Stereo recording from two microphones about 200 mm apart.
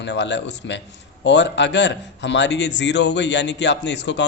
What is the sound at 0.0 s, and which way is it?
A man's voice, 60° left (ahead or behind).